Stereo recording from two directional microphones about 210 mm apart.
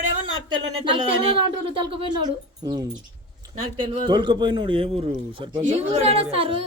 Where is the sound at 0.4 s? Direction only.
25° right (ahead or behind).